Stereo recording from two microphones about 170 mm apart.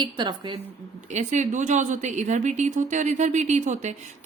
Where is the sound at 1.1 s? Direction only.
45° right (ahead or behind).